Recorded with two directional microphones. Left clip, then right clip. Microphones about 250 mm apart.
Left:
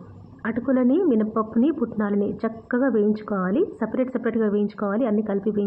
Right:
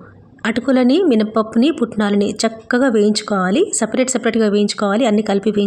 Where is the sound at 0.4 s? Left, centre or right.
Right.